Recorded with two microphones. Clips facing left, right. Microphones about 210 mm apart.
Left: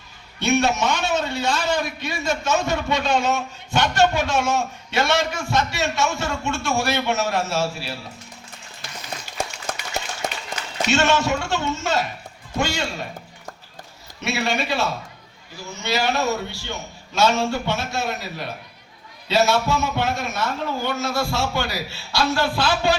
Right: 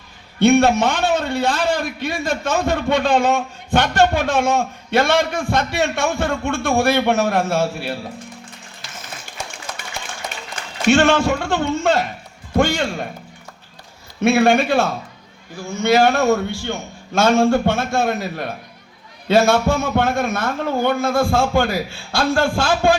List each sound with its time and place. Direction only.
0.3 s a man's voice: 55° right (ahead or behind)
9.7 s a sound: 50° left (ahead or behind)
10.5 s a man's voice: 55° right (ahead or behind)
14.2 s a man's voice: 50° right (ahead or behind)